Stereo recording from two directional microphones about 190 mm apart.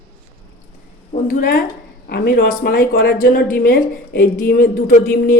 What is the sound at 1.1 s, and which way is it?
A woman's voice, 45° left (ahead or behind).